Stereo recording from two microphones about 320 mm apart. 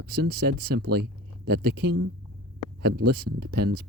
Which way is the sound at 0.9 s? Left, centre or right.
Right.